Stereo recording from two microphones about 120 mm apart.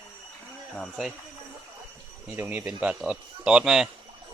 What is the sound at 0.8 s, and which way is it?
Speech, centre (ahead or behind).